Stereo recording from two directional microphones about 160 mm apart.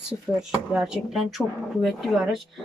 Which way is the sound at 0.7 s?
Centre (ahead or behind).